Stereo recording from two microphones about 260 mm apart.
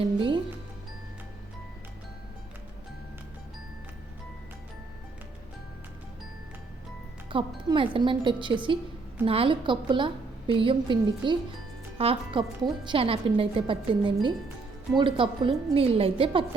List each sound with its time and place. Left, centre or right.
7.3 s a woman's voice: centre